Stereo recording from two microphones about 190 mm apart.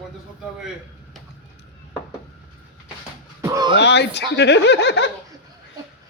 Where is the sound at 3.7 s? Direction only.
65° left (ahead or behind).